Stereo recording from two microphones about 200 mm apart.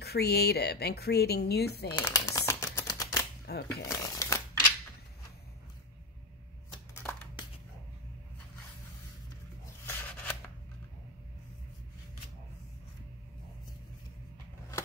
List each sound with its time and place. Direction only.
0.0 s a woman's voice: 55° left (ahead or behind)
2.0 s typewriter: 15° left (ahead or behind)
3.5 s speech: 55° left (ahead or behind)
3.9 s speech: 15° left (ahead or behind)
7.0 s a sound: 5° left (ahead or behind)
9.8 s a sound: 10° left (ahead or behind)